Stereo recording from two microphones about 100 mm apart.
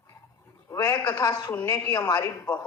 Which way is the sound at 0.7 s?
40° left (ahead or behind).